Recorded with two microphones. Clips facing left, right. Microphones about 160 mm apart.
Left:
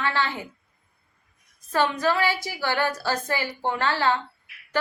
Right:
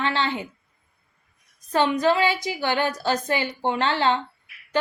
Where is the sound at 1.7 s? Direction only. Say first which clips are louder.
Right 3 dB; 20° right (ahead or behind).